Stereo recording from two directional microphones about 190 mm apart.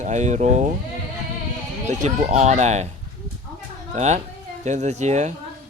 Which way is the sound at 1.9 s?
40° right (ahead or behind).